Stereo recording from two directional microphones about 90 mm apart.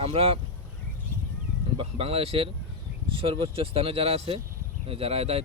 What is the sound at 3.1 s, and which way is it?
Speech, 75° right (ahead or behind).